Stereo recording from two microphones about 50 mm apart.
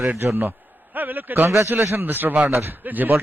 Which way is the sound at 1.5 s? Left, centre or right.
Right.